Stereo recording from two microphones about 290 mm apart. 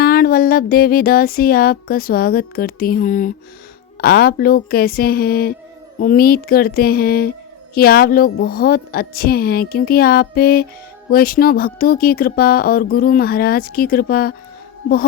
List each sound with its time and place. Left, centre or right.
0.0 s speech: left